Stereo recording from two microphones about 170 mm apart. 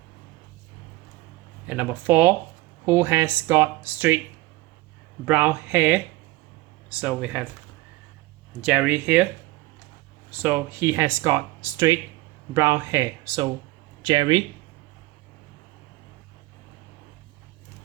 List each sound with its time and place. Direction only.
1.6 s speech: 10° right (ahead or behind)
5.2 s speech: 10° right (ahead or behind)
8.6 s speech: 10° right (ahead or behind)
10.3 s speech: 10° right (ahead or behind); by 14.4 s 30° right (ahead or behind)